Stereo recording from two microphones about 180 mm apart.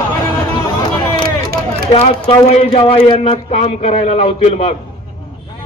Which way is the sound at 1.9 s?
35° left (ahead or behind).